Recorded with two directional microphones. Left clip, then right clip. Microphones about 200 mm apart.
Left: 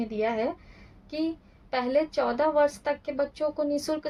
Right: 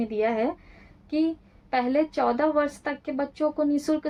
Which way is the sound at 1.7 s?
45° right (ahead or behind).